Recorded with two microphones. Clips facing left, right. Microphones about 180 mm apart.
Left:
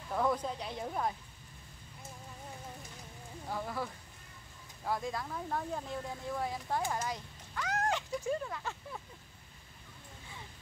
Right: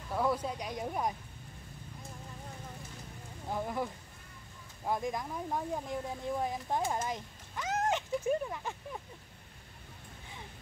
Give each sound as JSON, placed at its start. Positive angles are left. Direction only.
{"t": 0.1, "sound": "speech", "side_deg": -5}
{"t": 3.4, "sound": "speech", "side_deg": -20}